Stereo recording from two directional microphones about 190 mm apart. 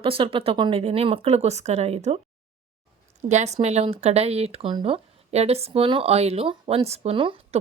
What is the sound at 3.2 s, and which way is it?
Speech, 40° right (ahead or behind).